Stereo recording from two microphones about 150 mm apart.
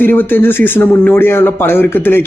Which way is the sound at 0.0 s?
15° left (ahead or behind).